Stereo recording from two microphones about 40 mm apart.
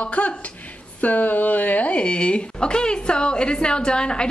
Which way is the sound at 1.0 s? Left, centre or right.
Left.